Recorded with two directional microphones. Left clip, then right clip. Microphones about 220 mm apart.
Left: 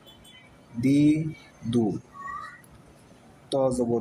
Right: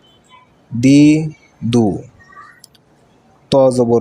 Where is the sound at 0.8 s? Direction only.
40° right (ahead or behind).